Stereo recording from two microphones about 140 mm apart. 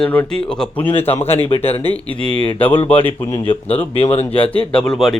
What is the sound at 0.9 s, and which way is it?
Speech, 45° left (ahead or behind).